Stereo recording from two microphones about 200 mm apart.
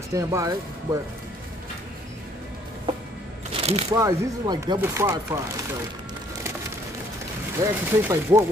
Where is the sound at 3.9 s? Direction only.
15° right (ahead or behind).